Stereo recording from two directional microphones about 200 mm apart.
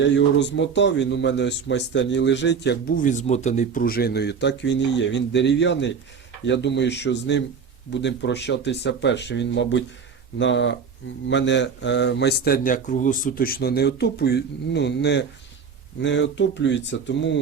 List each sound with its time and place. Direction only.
0.0 s speech: 65° left (ahead or behind)
3.0 s speech: 35° left (ahead or behind); by 17.4 s 65° left (ahead or behind)